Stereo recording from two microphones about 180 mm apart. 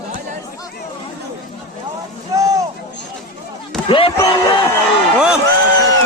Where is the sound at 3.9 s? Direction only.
30° left (ahead or behind).